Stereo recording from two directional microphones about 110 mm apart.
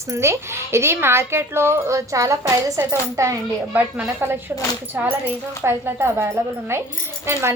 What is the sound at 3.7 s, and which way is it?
A woman's voice, 15° right (ahead or behind).